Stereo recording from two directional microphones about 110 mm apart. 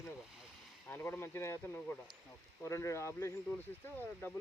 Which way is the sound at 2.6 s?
25° left (ahead or behind).